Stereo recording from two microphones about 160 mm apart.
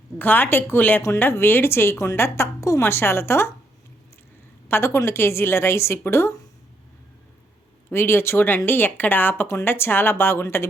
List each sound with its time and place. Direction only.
0.2 s speech: 10° left (ahead or behind)
4.7 s speech: 15° left (ahead or behind)
7.9 s speech: 15° left (ahead or behind)